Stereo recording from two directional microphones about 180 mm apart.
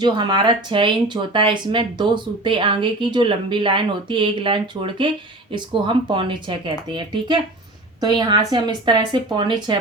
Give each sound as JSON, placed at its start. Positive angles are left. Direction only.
{"t": 0.0, "sound": "speech", "side_deg": -25}